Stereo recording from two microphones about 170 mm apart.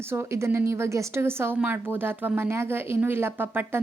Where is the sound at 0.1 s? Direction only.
15° right (ahead or behind).